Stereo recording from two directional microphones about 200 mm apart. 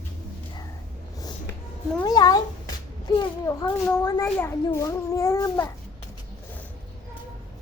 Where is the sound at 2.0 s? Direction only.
20° left (ahead or behind).